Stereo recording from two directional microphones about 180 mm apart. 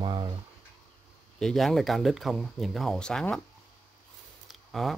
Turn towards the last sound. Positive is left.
turn(degrees=0)  # may be behind; listen again after turning